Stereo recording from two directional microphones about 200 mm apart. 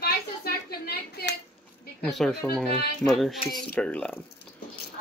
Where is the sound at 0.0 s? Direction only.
50° left (ahead or behind).